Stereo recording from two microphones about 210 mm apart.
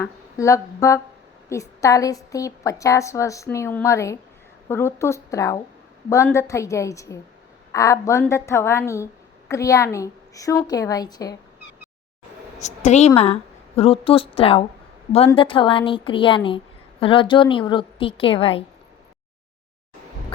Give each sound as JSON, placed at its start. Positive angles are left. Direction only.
{"t": 0.0, "sound": "a woman's voice", "side_deg": 15}
{"t": 12.5, "sound": "a woman's voice", "side_deg": 35}